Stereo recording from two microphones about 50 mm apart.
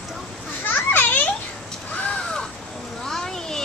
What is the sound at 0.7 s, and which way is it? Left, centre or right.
Children playing, left.